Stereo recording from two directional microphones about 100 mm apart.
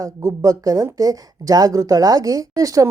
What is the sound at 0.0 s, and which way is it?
Speech, 35° right (ahead or behind).